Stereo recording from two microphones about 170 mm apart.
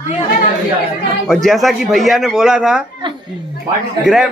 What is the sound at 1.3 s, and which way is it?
A man's voice, centre (ahead or behind).